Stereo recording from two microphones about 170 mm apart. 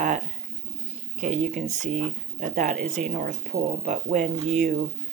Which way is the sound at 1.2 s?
45° right (ahead or behind).